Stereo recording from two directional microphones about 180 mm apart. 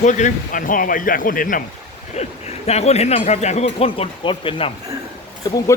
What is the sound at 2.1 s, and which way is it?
Speech, 35° left (ahead or behind).